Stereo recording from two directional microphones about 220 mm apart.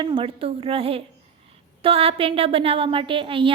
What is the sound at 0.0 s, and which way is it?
A woman's voice, 25° right (ahead or behind).